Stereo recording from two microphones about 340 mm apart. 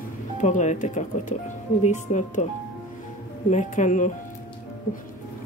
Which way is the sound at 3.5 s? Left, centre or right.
Left.